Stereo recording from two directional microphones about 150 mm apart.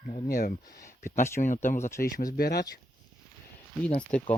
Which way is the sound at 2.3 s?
90° left.